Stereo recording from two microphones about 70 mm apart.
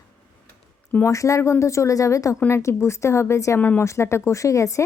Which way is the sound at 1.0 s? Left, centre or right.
Left.